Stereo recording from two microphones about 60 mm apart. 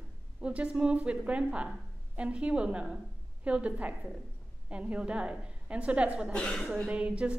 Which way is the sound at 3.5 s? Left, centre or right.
Right.